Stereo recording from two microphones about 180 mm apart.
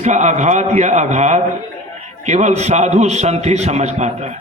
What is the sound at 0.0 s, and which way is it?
A man's voice, 40° right (ahead or behind).